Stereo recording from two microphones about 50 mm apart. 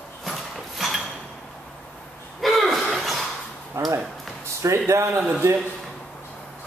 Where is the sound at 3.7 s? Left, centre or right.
Right.